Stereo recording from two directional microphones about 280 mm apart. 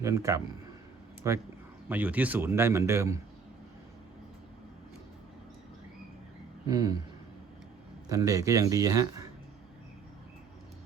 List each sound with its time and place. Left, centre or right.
0.0 s a man's voice: centre
6.7 s a man's voice: centre
8.1 s a man's voice: centre